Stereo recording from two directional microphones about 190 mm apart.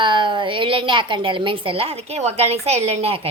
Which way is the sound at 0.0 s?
25° right (ahead or behind).